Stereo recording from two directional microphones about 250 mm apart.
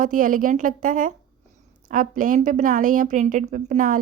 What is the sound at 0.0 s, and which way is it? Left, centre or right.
A woman's voice, right.